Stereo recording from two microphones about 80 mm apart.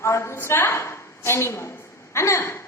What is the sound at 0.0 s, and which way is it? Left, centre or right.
A woman's voice, left.